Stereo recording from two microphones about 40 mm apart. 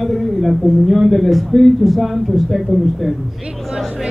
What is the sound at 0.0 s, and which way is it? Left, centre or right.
Speech, centre.